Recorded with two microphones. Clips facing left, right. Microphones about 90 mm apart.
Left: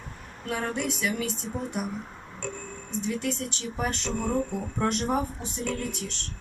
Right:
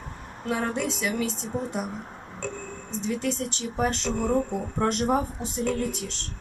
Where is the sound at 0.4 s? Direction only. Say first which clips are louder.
Right 2 dB; 30° right (ahead or behind).